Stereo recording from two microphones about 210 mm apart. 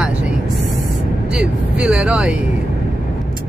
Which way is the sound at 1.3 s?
5° right (ahead or behind).